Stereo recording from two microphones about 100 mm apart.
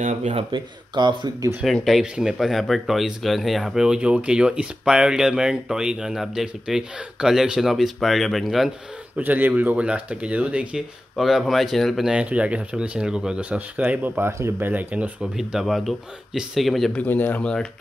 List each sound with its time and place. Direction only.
0.5 s speech: 50° right (ahead or behind)
1.9 s speech: 5° right (ahead or behind)
9.2 s speech: 20° right (ahead or behind)
11.1 s speech: centre (ahead or behind)
12.1 s speech: 10° right (ahead or behind)
15.3 s speech: 5° right (ahead or behind)
16.9 s speech: 15° left (ahead or behind)